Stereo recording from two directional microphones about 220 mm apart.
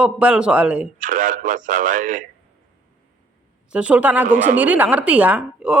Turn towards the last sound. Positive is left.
turn(degrees=-5)  # may be behind; listen again after turning